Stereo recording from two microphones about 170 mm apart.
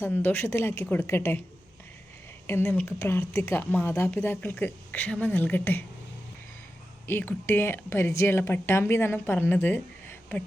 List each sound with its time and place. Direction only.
0.0 s a woman's voice: 10° left (ahead or behind)
2.5 s a woman's voice: 10° left (ahead or behind)
7.1 s a woman's voice: 15° left (ahead or behind)